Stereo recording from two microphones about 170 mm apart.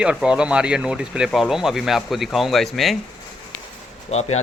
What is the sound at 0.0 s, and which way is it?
Speech, 5° right (ahead or behind).